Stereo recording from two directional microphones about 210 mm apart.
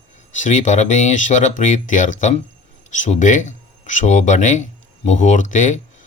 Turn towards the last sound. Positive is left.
turn(degrees=35)  # may be behind; listen again after turning